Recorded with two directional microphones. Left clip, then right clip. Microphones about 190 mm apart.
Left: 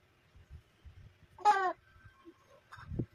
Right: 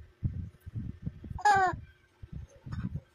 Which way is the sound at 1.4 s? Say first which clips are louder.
Right 4 dB; 65° right (ahead or behind).